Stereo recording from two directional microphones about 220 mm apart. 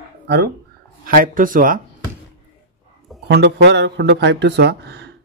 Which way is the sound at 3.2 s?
50° right (ahead or behind).